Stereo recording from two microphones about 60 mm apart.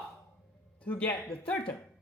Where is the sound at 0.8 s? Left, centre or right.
Left.